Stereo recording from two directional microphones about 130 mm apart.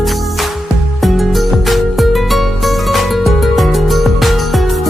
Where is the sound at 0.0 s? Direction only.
Centre (ahead or behind).